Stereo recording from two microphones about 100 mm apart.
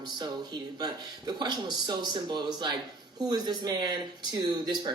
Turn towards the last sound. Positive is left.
turn(degrees=-45)  # may be behind; listen again after turning